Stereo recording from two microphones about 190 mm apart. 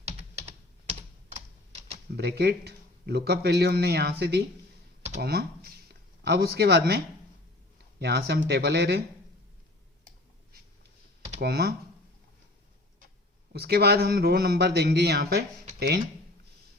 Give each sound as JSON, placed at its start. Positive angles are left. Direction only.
{"t": 2.1, "sound": "speech", "side_deg": -55}
{"t": 11.3, "sound": "speech", "side_deg": -55}
{"t": 13.5, "sound": "speech", "side_deg": -55}